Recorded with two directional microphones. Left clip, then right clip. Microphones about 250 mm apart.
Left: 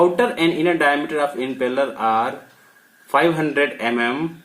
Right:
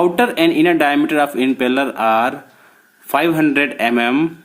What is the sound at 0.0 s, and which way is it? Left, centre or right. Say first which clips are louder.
A man's voice: right 2 dB; right.